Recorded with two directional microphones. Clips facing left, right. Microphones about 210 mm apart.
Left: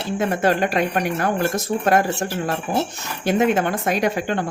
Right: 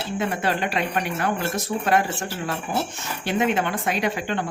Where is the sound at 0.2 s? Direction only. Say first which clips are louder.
Left 6 dB; 45° left (ahead or behind).